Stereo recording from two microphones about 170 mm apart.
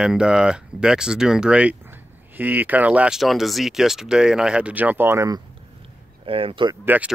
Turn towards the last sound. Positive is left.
turn(degrees=-10)  # may be behind; listen again after turning